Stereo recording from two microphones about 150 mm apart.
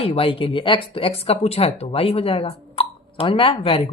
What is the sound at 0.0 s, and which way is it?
Speech, 40° left (ahead or behind).